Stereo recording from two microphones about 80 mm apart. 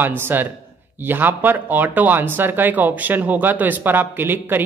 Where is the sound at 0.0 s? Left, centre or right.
Right.